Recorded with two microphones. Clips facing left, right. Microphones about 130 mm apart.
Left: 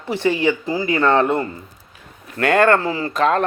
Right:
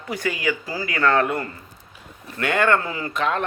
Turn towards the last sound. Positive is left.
turn(degrees=40)  # may be behind; listen again after turning